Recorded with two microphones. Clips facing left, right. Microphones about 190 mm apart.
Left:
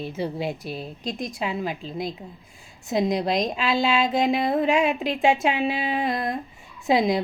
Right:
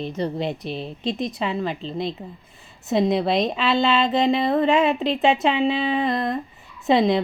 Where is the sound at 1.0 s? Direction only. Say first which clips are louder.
Right 7 dB; 25° right (ahead or behind).